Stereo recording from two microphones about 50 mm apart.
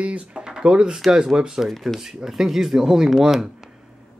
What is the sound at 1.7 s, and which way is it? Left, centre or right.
Speech, centre.